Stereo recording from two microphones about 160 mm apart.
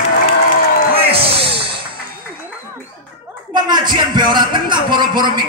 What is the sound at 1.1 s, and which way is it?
Music, 35° right (ahead or behind).